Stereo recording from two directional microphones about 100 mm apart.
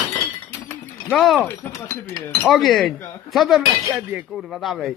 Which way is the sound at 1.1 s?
Centre (ahead or behind).